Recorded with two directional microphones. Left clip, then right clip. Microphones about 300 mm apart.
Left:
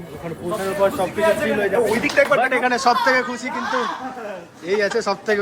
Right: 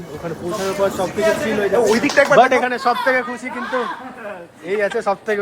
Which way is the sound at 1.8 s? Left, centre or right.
Right.